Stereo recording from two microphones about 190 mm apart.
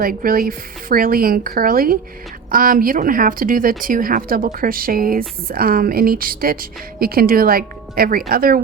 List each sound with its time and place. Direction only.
0.0 s a woman's voice: 50° right (ahead or behind)